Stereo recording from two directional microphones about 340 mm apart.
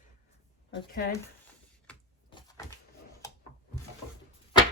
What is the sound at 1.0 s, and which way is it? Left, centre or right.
Speech, left.